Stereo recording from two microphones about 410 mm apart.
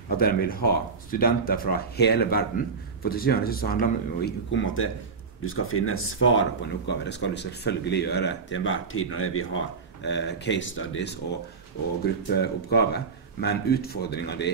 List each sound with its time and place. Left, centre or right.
0.2 s speech: left
12.3 s speech: left